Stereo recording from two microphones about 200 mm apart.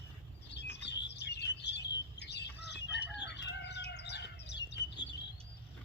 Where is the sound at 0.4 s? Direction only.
60° left (ahead or behind).